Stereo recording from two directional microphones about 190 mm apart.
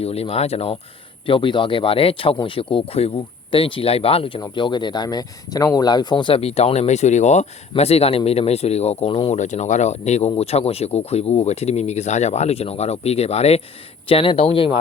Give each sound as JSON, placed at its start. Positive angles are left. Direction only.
{"t": 0.0, "sound": "speech", "side_deg": 30}